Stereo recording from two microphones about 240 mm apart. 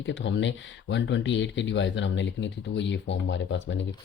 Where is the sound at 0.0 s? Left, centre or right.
Left.